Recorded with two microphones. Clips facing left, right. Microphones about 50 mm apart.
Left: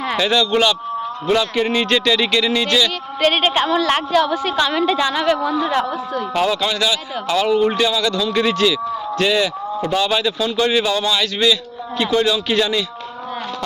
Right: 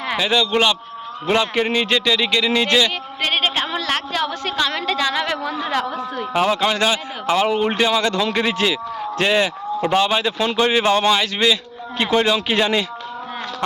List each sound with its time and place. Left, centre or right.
0.1 s speech: centre
1.7 s a woman's voice: centre
2.6 s speech: right
3.2 s a woman's voice: centre
6.3 s speech: right
7.3 s speech: right
8.4 s a man's voice: right
10.8 s speech: right
11.2 s speech: right